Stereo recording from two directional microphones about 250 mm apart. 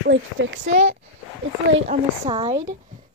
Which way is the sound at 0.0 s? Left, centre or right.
Right.